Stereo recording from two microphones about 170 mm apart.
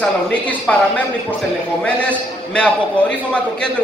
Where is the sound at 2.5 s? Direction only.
5° left (ahead or behind).